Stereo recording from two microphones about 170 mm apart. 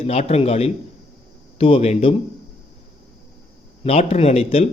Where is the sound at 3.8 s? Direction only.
35° left (ahead or behind).